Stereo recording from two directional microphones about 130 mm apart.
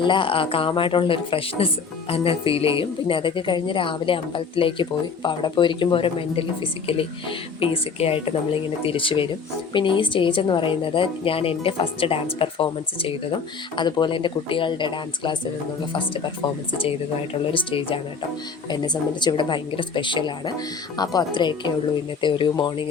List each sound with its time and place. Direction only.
0.0 s a woman's voice: 40° left (ahead or behind)
17.5 s a woman's voice: 40° left (ahead or behind)